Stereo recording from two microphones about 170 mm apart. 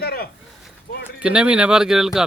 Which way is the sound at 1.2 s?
5° right (ahead or behind).